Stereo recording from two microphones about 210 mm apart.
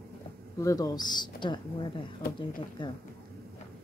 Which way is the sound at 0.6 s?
15° left (ahead or behind).